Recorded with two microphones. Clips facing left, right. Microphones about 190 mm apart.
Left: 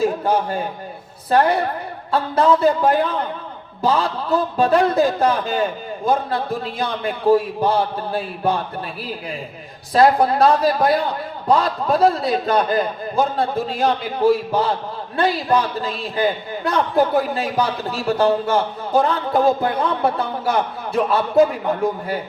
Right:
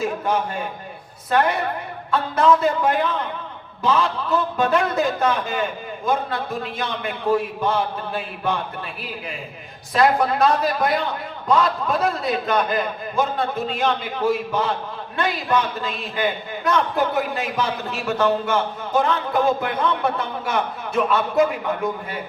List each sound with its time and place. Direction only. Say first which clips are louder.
0.0 s a man's voice: left 4 dB; 35° left (ahead or behind)
9.9 s a man's voice: left 4 dB; 35° left (ahead or behind)